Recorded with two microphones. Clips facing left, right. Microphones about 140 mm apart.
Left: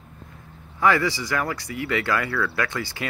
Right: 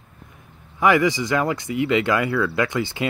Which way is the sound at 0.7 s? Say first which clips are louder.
Right 3 dB; 20° right (ahead or behind).